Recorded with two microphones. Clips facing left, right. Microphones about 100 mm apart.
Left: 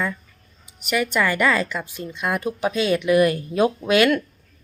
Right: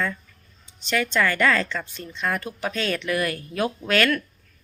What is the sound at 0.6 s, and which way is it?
A woman's voice, 10° left (ahead or behind).